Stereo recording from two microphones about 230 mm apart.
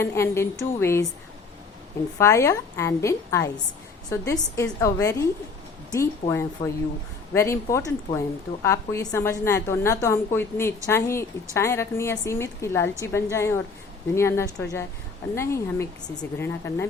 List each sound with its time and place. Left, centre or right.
0.0 s a woman's voice: centre
2.1 s a woman's voice: centre